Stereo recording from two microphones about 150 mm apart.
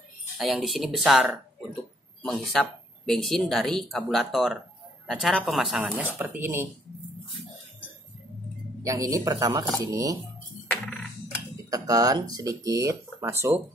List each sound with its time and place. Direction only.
0.4 s speech: centre (ahead or behind)
2.2 s speech: 5° left (ahead or behind); by 6.7 s 15° right (ahead or behind)
8.8 s speech: 25° right (ahead or behind)
10.7 s coin: 5° left (ahead or behind)
11.7 s speech: 25° right (ahead or behind)